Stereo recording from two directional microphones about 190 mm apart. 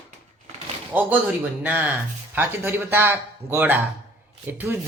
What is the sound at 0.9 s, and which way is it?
Speech, 10° right (ahead or behind).